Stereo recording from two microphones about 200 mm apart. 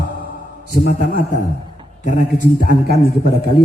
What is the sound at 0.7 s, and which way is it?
Speech, 45° left (ahead or behind).